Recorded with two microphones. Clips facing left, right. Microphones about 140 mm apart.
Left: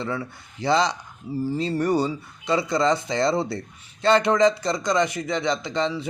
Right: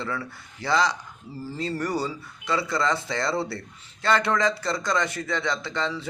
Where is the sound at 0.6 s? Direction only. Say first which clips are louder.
Left 3 dB; 20° left (ahead or behind).